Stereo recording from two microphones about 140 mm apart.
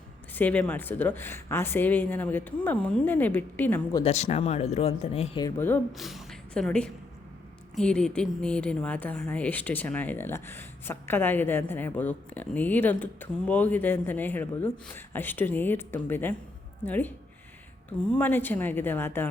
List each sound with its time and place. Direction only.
0.3 s a woman's voice: 10° left (ahead or behind)
4.0 s speech: 50° left (ahead or behind)
5.5 s a woman's voice: 15° left (ahead or behind)
5.9 s a woman's voice: centre (ahead or behind); by 19.3 s 15° left (ahead or behind)